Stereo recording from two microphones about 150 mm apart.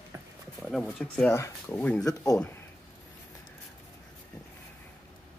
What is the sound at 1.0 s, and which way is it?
Speech, 5° left (ahead or behind).